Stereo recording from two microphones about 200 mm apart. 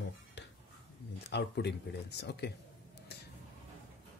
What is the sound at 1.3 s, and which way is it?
Speech, 55° left (ahead or behind).